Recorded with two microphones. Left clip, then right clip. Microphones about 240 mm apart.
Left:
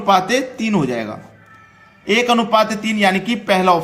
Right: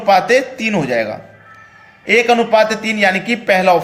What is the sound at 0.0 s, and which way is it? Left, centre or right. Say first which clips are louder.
A man's voice: right 4 dB; centre.